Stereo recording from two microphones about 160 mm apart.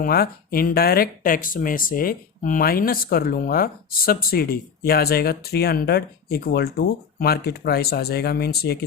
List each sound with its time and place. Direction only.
0.0 s speech: 70° left (ahead or behind)